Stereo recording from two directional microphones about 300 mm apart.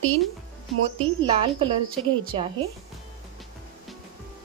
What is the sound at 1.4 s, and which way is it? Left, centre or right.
A woman's voice, centre.